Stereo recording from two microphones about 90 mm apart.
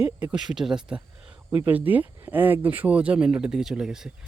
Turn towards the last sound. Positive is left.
turn(degrees=-5)  # may be behind; listen again after turning